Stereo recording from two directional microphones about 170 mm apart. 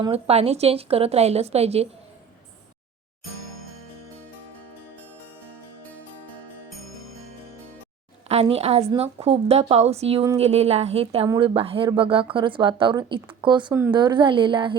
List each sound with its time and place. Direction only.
0.0 s a woman's voice: 35° right (ahead or behind)
8.3 s a woman's voice: 40° right (ahead or behind)
13.7 s speech: 15° right (ahead or behind)
13.9 s speech: 25° right (ahead or behind)